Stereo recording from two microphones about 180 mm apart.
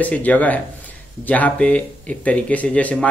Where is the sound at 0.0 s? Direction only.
10° left (ahead or behind).